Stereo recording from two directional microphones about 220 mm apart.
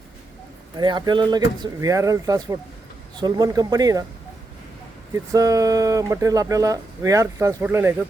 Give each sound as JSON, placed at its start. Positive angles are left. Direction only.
{"t": 0.8, "sound": "speech", "side_deg": -20}
{"t": 5.1, "sound": "speech", "side_deg": -15}